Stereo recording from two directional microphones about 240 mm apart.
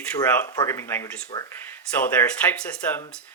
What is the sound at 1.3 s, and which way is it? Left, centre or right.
Speech, centre.